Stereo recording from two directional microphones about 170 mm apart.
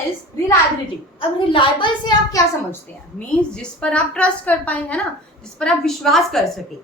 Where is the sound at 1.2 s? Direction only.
30° left (ahead or behind).